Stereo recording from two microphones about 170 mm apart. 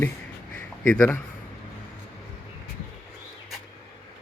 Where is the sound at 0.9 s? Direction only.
10° left (ahead or behind).